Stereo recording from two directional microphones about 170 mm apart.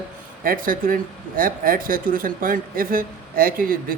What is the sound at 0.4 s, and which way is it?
Speech, 55° right (ahead or behind).